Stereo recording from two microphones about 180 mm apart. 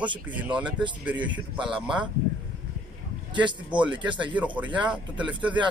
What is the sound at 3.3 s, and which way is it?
Speech, 25° right (ahead or behind).